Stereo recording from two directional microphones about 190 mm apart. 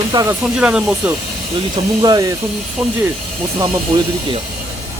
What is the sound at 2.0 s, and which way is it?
Speech, 20° right (ahead or behind).